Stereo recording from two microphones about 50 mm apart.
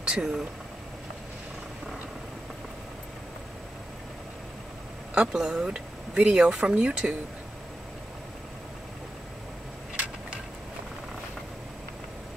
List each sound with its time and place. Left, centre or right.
0.0 s speech: centre
5.1 s speech: centre